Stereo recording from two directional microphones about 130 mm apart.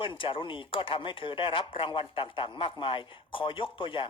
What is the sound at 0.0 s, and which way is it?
A man's voice, 45° left (ahead or behind).